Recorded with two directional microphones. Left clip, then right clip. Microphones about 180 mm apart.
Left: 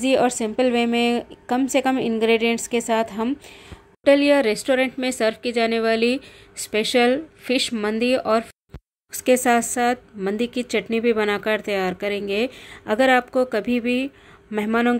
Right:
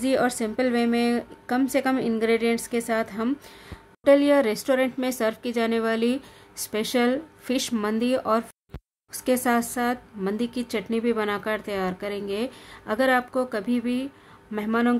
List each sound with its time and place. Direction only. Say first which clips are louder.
0.0 s a woman's voice: left 4 dB; 10° left (ahead or behind)
9.2 s a woman's voice: left 6 dB; 15° left (ahead or behind)